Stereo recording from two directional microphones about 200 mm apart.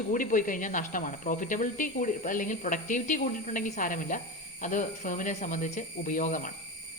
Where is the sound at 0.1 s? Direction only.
40° left (ahead or behind).